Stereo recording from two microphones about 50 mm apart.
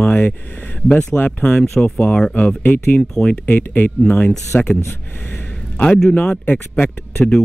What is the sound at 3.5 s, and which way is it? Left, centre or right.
Speech, left.